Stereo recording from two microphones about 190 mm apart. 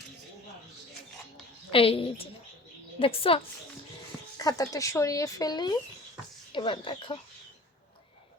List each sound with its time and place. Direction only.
1.7 s speech: 30° left (ahead or behind)
4.4 s speech: 20° left (ahead or behind)